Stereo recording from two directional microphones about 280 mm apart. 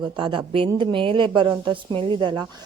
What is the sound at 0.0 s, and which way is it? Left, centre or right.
A woman's voice, centre.